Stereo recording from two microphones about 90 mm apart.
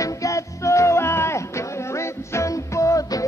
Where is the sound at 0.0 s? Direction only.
35° left (ahead or behind).